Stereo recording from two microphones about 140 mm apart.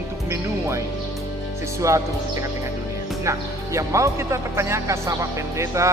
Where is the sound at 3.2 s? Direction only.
20° right (ahead or behind).